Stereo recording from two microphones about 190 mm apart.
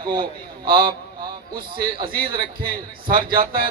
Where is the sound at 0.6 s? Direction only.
50° right (ahead or behind).